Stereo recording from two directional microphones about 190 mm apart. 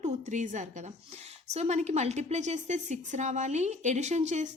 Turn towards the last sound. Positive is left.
turn(degrees=-40)  # may be behind; listen again after turning